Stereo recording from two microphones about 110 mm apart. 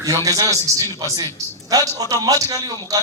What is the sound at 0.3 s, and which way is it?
A man's voice, 35° right (ahead or behind).